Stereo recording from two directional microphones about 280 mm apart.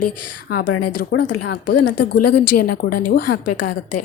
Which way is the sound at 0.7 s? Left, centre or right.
Left.